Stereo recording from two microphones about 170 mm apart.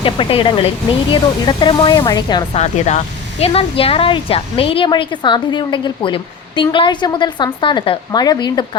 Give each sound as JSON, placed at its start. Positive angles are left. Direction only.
{"t": 0.0, "sound": "a woman's voice", "side_deg": 30}
{"t": 2.6, "sound": "a woman's voice", "side_deg": 40}